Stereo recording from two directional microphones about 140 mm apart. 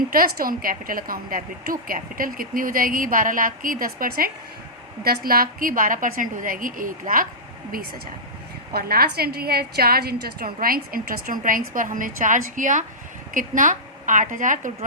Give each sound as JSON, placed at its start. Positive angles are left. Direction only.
{"t": 0.1, "sound": "a woman's voice", "side_deg": -90}
{"t": 8.7, "sound": "a woman's voice", "side_deg": -90}